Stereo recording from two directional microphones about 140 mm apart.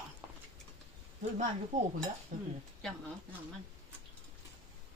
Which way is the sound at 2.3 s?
75° right (ahead or behind).